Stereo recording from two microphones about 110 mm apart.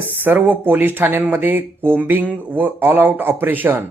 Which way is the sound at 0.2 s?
15° right (ahead or behind).